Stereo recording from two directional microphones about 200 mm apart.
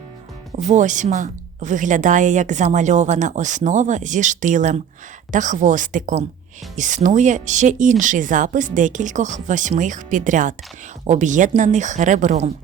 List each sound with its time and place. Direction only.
0.7 s speech: 40° right (ahead or behind)